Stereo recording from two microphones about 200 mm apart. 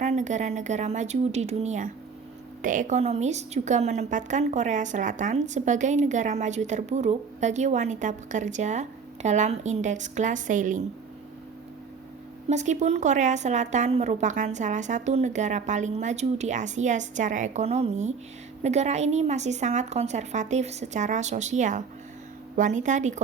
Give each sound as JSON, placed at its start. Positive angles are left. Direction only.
{"t": 0.0, "sound": "a woman's voice", "side_deg": -35}
{"t": 12.5, "sound": "a woman's voice", "side_deg": -35}